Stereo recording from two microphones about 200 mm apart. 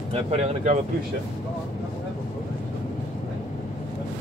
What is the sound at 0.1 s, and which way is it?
Speech, 30° right (ahead or behind).